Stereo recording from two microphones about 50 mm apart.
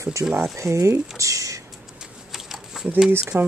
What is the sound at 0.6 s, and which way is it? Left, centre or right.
Speech, right.